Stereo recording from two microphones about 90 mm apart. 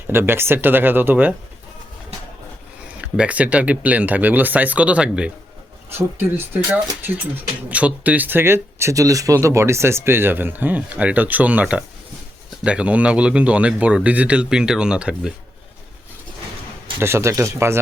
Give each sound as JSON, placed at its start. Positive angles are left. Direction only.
{"t": 0.1, "sound": "speech", "side_deg": -25}
{"t": 3.0, "sound": "speech", "side_deg": -15}
{"t": 5.9, "sound": "speech", "side_deg": -25}
{"t": 17.0, "sound": "speech", "side_deg": -30}